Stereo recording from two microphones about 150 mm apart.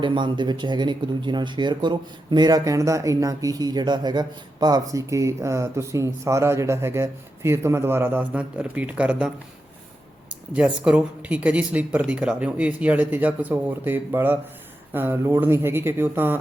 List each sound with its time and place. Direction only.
0.0 s speech: 30° right (ahead or behind); by 16.4 s 15° right (ahead or behind)